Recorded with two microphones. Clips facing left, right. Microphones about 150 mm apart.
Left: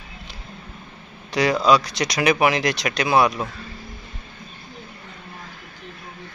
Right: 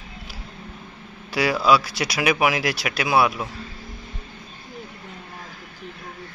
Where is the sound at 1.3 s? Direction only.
5° right (ahead or behind).